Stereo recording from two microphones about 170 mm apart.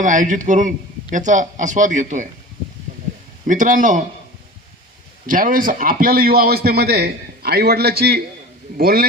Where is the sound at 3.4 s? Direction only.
50° right (ahead or behind).